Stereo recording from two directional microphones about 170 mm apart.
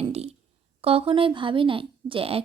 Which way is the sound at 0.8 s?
35° right (ahead or behind).